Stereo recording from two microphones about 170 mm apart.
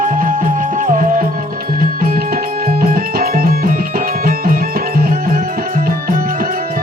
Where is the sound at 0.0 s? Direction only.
55° right (ahead or behind).